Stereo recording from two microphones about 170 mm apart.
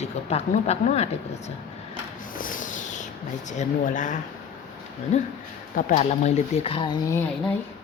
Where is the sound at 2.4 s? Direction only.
50° left (ahead or behind).